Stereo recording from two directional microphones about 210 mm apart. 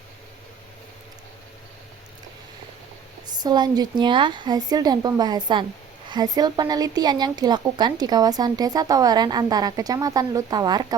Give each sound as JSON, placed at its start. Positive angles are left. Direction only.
{"t": 3.4, "sound": "speech", "side_deg": -20}